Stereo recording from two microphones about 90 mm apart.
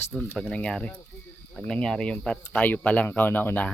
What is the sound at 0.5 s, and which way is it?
Speech, 10° left (ahead or behind).